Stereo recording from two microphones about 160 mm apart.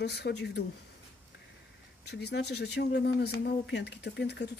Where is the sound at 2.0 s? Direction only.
90° left.